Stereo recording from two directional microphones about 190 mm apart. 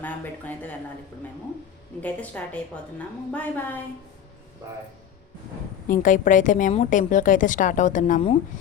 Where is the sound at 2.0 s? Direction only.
10° left (ahead or behind).